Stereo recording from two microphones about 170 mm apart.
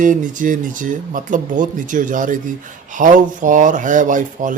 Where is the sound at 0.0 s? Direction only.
50° right (ahead or behind).